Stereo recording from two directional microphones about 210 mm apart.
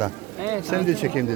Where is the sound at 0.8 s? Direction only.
5° left (ahead or behind).